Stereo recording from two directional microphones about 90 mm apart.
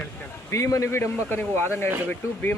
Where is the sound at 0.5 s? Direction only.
35° left (ahead or behind).